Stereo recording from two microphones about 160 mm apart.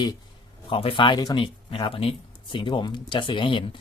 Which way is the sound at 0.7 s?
35° left (ahead or behind).